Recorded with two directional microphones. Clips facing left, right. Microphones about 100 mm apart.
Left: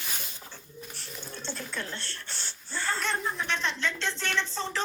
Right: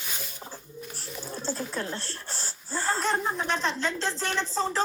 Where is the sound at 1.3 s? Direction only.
35° right (ahead or behind).